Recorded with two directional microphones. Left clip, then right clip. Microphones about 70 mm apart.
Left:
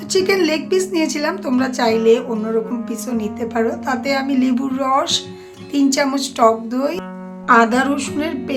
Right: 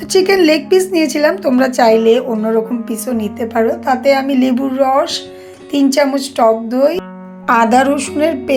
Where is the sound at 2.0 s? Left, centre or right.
Right.